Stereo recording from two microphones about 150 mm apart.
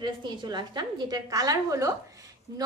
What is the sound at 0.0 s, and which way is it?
A woman's voice, 30° right (ahead or behind).